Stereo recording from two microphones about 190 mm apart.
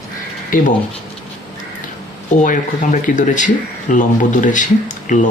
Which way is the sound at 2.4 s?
40° left (ahead or behind).